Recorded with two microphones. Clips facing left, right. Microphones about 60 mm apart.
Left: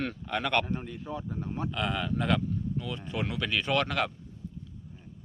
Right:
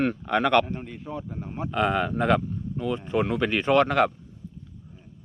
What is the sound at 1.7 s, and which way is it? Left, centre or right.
Speech, right.